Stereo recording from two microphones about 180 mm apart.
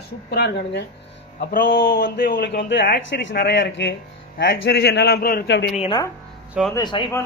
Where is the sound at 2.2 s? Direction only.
60° left (ahead or behind).